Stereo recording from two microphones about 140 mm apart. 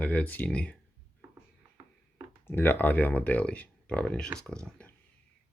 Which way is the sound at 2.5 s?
15° left (ahead or behind).